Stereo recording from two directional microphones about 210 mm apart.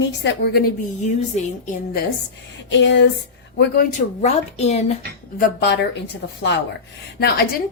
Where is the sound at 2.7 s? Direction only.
55° left (ahead or behind).